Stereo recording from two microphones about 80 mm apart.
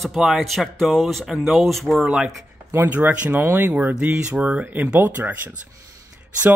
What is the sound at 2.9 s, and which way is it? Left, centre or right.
Speech, centre.